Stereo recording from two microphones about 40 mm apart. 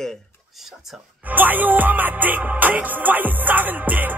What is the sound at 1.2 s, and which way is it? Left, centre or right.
Music, right.